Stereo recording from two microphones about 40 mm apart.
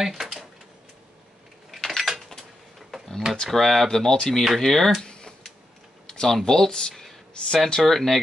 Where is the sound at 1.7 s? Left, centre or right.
Centre.